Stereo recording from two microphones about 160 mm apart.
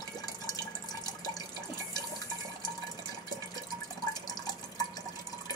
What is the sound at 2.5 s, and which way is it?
Water, 25° left (ahead or behind).